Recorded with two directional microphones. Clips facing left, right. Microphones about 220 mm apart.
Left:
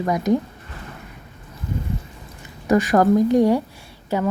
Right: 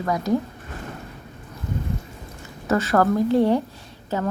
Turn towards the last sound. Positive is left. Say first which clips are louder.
# left 3 dB
turn(degrees=15)  # may be behind; listen again after turning